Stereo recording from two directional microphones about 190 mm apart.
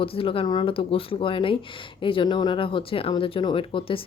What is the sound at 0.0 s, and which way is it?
Speech, 30° left (ahead or behind).